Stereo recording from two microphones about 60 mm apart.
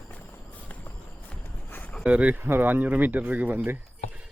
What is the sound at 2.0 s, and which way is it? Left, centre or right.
Speech, right.